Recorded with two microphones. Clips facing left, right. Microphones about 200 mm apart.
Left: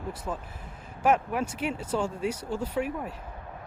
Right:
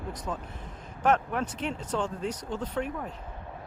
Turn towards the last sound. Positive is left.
turn(degrees=10)  # may be behind; listen again after turning